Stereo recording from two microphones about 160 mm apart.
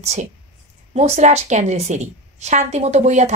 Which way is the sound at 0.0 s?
45° right (ahead or behind).